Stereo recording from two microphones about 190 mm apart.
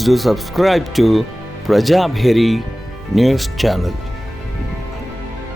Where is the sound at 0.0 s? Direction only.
Centre (ahead or behind).